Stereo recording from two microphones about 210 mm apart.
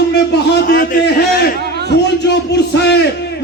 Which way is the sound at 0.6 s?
40° left (ahead or behind).